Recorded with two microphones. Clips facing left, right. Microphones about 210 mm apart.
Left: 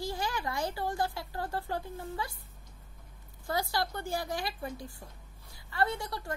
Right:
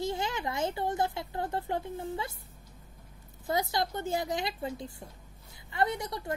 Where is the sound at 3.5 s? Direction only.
20° right (ahead or behind).